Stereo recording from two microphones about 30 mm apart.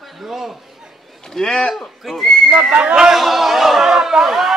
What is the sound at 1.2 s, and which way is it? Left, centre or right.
Speech, left.